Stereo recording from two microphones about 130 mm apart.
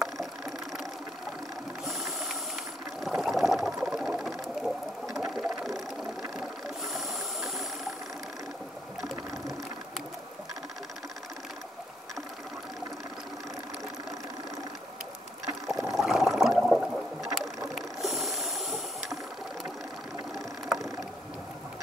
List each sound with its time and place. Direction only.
0.0 s ratchet: centre (ahead or behind)
1.9 s ratchet: centre (ahead or behind)
3.0 s a sound: centre (ahead or behind)
5.1 s ratchet: centre (ahead or behind)
6.3 s mechanisms: centre (ahead or behind)
9.0 s a sound: centre (ahead or behind)
15.4 s boat: 25° right (ahead or behind)
15.9 s a sound: centre (ahead or behind)
17.7 s ratchet: centre (ahead or behind)
20.3 s boat: centre (ahead or behind)